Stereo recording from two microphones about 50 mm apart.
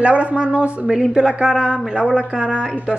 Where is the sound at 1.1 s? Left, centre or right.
Centre.